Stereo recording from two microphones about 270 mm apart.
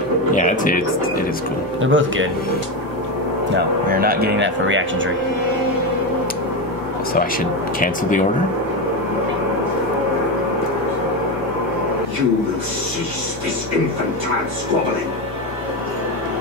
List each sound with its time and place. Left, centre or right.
0.3 s music: left
1.8 s speech: right
3.9 s speech: right